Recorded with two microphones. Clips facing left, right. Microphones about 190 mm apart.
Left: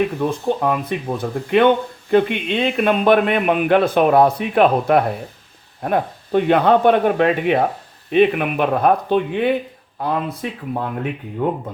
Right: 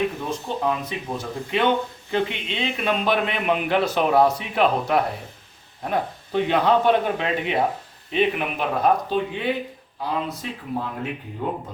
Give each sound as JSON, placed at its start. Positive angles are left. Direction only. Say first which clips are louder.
{"t": 0.2, "sound": "speech", "louder": "left 7 dB", "side_deg": 55}
{"t": 11.4, "sound": "speech", "louder": "left 7 dB", "side_deg": 60}